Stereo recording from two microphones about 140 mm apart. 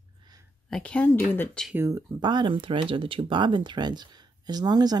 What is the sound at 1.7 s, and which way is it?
Speech, 20° right (ahead or behind).